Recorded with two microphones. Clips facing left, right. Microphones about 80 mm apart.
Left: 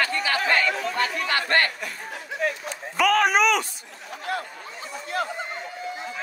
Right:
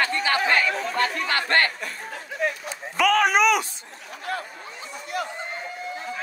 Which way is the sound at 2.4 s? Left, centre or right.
Centre.